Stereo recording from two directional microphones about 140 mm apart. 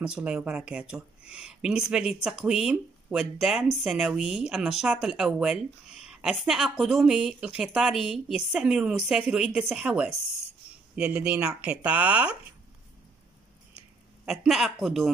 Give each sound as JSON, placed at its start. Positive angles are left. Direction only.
{"t": 0.0, "sound": "speech", "side_deg": -5}
{"t": 14.2, "sound": "speech", "side_deg": 0}